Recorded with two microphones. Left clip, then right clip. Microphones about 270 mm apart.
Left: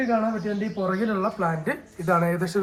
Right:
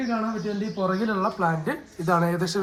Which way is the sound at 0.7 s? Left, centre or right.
Centre.